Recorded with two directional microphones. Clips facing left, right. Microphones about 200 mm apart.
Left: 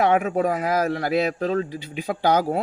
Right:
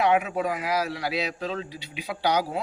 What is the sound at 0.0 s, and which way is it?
Speech, 45° left (ahead or behind).